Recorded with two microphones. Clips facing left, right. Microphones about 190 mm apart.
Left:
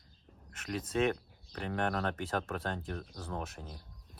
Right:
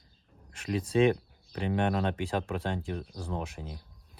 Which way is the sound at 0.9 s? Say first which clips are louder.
Right 7 dB; 30° right (ahead or behind).